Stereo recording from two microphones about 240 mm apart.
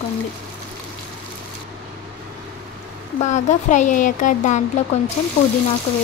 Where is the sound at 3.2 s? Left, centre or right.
Left.